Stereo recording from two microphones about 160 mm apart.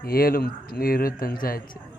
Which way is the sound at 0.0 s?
70° left (ahead or behind).